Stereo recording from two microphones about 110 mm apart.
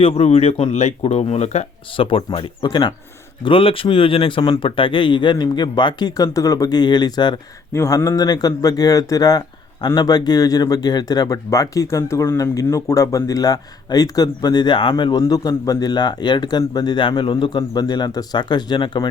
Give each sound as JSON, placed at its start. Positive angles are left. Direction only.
{"t": 0.0, "sound": "speech", "side_deg": 70}
{"t": 2.0, "sound": "speech", "side_deg": 50}
{"t": 7.7, "sound": "speech", "side_deg": 30}
{"t": 15.2, "sound": "speech", "side_deg": 35}